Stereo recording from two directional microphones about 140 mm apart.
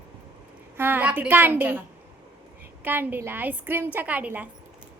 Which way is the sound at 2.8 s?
15° right (ahead or behind).